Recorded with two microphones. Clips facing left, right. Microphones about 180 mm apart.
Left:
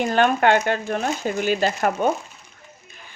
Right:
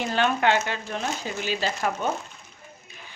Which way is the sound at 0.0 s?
50° left (ahead or behind).